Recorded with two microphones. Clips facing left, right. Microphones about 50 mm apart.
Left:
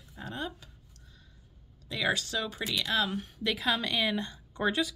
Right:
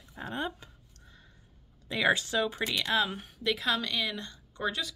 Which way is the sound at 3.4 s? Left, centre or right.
Centre.